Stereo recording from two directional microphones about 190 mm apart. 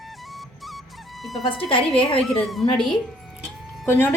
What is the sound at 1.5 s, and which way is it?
Speech, 30° left (ahead or behind).